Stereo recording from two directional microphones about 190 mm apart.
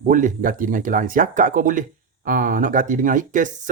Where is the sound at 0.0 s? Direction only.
45° right (ahead or behind).